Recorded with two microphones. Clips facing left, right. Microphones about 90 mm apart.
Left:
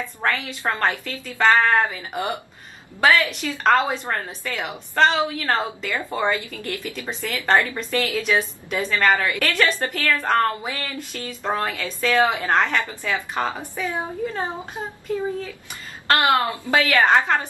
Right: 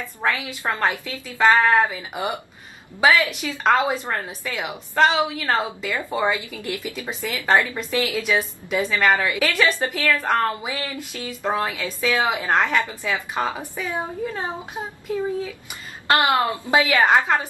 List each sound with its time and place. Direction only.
0.2 s a woman's voice: 5° right (ahead or behind)
16.1 s a woman's voice: 20° right (ahead or behind)
17.0 s a woman's voice: 5° right (ahead or behind)